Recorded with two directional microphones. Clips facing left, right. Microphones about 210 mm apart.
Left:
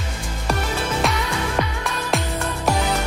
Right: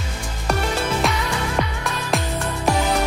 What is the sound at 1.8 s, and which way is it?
Music, centre (ahead or behind).